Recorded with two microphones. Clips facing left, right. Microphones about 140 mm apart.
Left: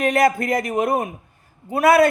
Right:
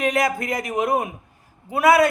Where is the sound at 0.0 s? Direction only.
55° left (ahead or behind).